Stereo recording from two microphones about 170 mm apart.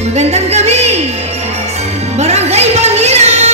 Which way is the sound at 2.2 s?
40° right (ahead or behind).